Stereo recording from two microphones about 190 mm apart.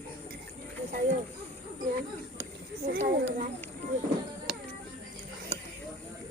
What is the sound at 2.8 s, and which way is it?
Speech, 55° right (ahead or behind).